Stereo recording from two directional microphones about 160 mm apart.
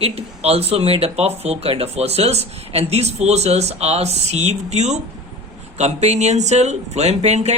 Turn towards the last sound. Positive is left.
turn(degrees=-45)  # may be behind; listen again after turning